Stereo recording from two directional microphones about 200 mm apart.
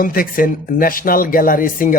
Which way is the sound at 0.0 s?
45° left (ahead or behind).